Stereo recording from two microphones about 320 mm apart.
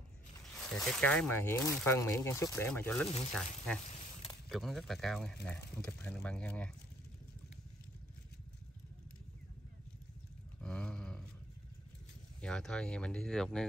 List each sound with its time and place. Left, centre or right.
0.7 s speech: centre
10.6 s a sound: centre
12.4 s speech: centre